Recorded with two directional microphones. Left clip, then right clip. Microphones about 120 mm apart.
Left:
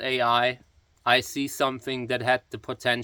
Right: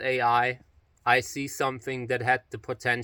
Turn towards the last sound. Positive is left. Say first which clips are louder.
# left 2 dB
turn(degrees=25)  # may be behind; listen again after turning